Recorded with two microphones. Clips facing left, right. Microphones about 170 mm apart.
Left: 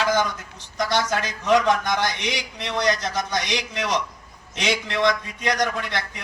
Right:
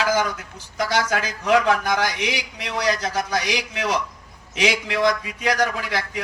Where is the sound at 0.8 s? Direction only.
5° right (ahead or behind).